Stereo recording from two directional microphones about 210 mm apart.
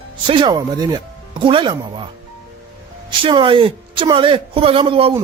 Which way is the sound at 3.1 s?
25° right (ahead or behind).